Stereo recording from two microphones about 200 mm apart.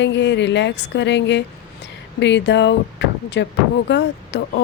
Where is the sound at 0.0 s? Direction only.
60° left (ahead or behind).